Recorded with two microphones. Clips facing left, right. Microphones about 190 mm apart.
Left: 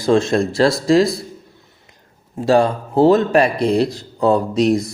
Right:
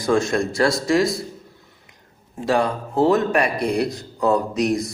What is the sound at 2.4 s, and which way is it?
A man's voice, 30° left (ahead or behind).